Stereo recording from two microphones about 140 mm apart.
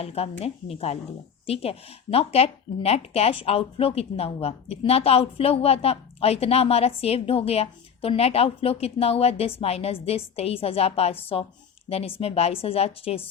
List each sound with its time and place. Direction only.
0.0 s speech: 45° left (ahead or behind)